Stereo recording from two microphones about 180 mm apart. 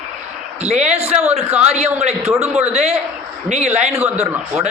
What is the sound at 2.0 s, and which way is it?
A woman's voice, 35° right (ahead or behind).